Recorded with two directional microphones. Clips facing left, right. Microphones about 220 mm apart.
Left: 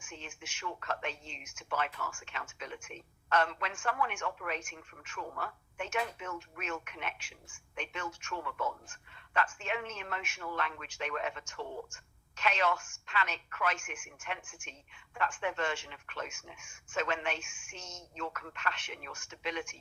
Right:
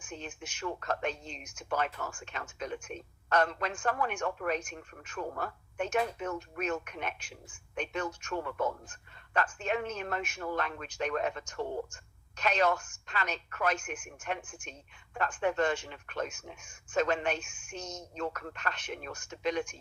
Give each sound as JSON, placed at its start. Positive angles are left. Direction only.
{"t": 0.0, "sound": "speech", "side_deg": -40}